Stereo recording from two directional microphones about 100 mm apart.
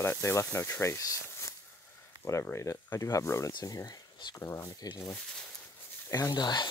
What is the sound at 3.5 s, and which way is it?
Speech, 45° left (ahead or behind).